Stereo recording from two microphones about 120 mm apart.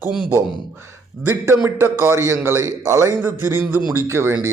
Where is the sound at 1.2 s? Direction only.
20° right (ahead or behind).